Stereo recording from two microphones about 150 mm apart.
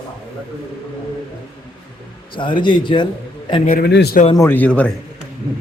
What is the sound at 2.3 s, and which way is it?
Speech, 35° left (ahead or behind).